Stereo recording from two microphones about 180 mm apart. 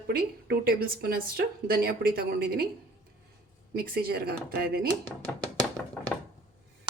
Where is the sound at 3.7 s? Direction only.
55° right (ahead or behind).